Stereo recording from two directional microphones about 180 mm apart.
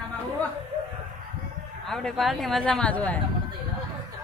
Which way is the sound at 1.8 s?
5° left (ahead or behind).